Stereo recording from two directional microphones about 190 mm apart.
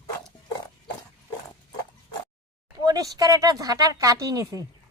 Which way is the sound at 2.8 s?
20° right (ahead or behind).